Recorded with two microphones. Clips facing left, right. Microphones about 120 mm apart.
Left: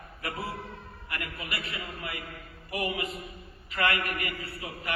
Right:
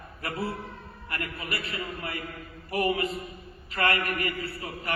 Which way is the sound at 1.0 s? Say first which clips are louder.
Right 3 dB; 40° right (ahead or behind).